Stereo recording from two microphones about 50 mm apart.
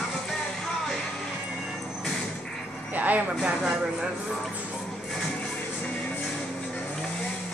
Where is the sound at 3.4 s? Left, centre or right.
Centre.